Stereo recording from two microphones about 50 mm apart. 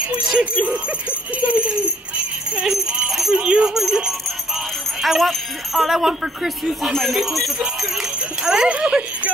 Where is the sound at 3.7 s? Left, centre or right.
Centre.